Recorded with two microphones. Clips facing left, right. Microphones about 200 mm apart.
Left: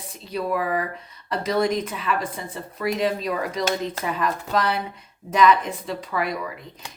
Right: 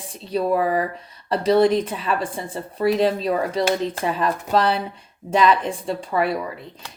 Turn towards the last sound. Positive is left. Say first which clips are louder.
# right 5 dB
turn(degrees=-30)  # may be behind; listen again after turning